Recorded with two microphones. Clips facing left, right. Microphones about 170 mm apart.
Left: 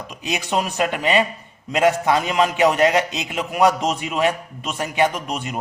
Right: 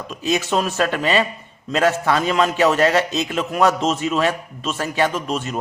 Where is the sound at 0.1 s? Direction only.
15° left (ahead or behind).